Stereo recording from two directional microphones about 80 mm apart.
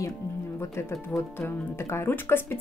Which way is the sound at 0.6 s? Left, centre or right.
Left.